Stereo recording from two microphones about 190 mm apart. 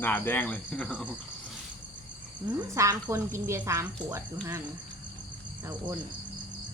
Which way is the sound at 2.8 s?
15° right (ahead or behind).